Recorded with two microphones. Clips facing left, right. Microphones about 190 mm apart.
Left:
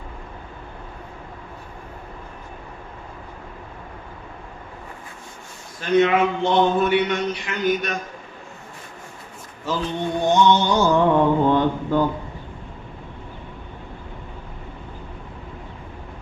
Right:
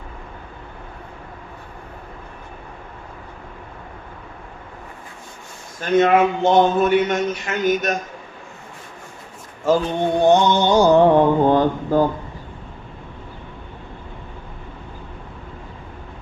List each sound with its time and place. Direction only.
5.8 s a man's voice: 45° right (ahead or behind)
9.6 s a man's voice: 50° right (ahead or behind)
10.7 s mantra: 35° right (ahead or behind)